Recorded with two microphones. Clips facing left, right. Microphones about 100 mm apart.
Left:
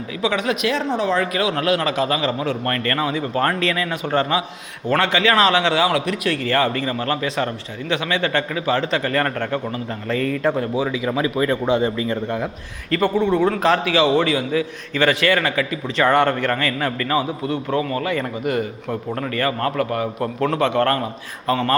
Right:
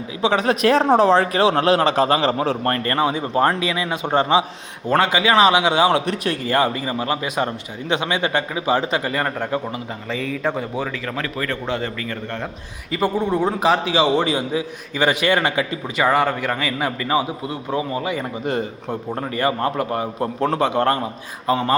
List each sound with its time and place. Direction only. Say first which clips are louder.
0.2 s a man's voice: right 3 dB; 35° right (ahead or behind); by 9.8 s 15° right (ahead or behind)
10.1 s a man's voice: left 4 dB; centre (ahead or behind); by 12.4 s 20° left (ahead or behind)
12.9 s a man's voice: left 2 dB; 10° right (ahead or behind)
16.0 s a man's voice: left 2 dB; 5° right (ahead or behind)